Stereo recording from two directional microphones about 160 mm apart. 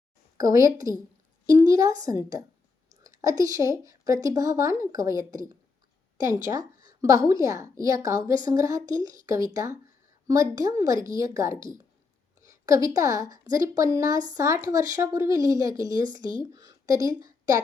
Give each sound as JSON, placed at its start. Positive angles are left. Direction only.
{"t": 0.3, "sound": "speech", "side_deg": -20}